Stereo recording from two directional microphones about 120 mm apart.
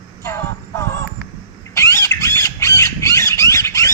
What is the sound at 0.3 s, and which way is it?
Music, 20° left (ahead or behind).